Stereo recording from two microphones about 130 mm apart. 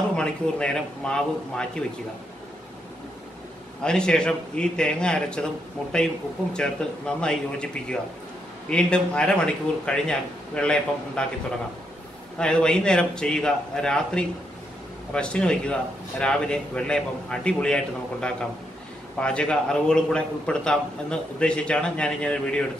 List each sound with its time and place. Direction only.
0.1 s a man's voice: 5° left (ahead or behind)
3.8 s a man's voice: 5° left (ahead or behind)
12.4 s a man's voice: 5° left (ahead or behind)